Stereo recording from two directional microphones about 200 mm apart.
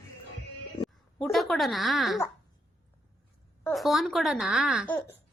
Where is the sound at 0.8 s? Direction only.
Centre (ahead or behind).